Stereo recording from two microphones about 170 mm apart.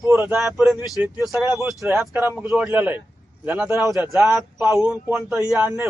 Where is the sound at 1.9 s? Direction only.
15° right (ahead or behind).